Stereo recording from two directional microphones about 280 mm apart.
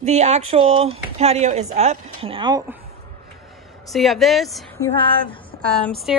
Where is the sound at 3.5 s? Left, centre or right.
Centre.